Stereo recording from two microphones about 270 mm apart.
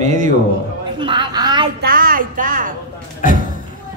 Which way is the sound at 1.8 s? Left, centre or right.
Right.